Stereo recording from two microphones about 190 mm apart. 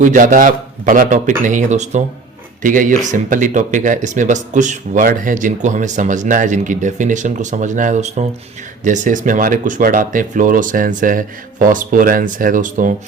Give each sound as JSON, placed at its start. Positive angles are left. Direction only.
{"t": 0.0, "sound": "speech", "side_deg": -45}